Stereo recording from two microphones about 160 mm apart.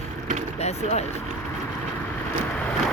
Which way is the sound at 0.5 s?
45° left (ahead or behind).